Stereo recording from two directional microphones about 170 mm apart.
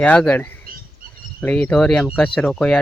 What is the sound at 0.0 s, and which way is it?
Speech, 5° left (ahead or behind).